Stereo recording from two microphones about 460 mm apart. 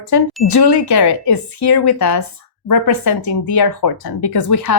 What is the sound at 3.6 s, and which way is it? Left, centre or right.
Speech, left.